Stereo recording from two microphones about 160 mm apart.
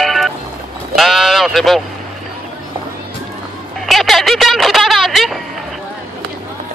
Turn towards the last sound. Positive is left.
turn(degrees=0)  # may be behind; listen again after turning